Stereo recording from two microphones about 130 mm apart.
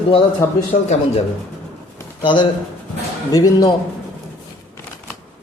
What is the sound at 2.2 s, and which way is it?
Speech, 40° left (ahead or behind).